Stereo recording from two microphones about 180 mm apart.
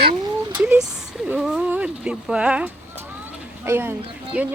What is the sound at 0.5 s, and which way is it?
Speech, 5° right (ahead or behind).